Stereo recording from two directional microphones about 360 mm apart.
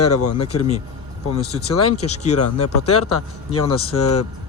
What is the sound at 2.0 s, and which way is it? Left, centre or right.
Speech, centre.